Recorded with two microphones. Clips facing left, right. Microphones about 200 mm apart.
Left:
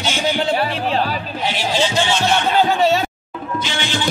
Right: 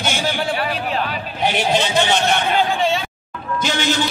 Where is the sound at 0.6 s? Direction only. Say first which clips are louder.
Left 3 dB; 30° left (ahead or behind).